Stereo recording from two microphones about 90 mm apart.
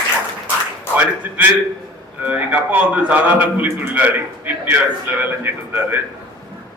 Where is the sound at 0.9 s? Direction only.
20° right (ahead or behind).